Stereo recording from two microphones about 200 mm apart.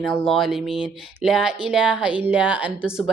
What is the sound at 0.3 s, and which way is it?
Speech, centre (ahead or behind).